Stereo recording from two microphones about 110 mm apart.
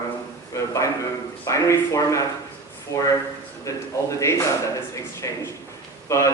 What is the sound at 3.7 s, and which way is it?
Speech, 30° left (ahead or behind).